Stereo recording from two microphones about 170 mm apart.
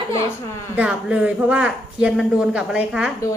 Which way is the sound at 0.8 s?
5° right (ahead or behind).